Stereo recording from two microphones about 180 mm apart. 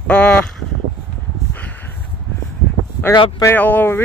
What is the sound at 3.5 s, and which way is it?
Speech, 10° left (ahead or behind).